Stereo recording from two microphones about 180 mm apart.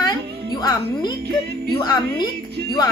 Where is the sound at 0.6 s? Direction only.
20° left (ahead or behind).